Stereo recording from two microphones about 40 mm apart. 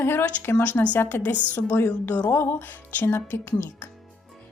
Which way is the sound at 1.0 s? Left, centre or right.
Left.